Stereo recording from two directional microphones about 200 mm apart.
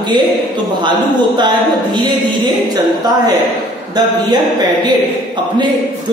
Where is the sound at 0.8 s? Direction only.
20° right (ahead or behind).